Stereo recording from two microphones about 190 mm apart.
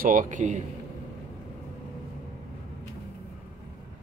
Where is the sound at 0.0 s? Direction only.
45° right (ahead or behind).